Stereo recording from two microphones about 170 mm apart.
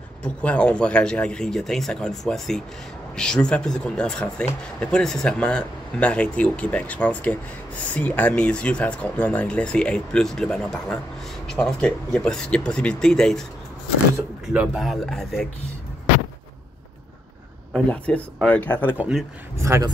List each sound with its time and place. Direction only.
0.2 s speech: 5° left (ahead or behind)
14.5 s speech: 5° right (ahead or behind)
17.7 s speech: 5° left (ahead or behind)
18.9 s speech: 5° right (ahead or behind)
19.6 s a man's voice: 20° right (ahead or behind)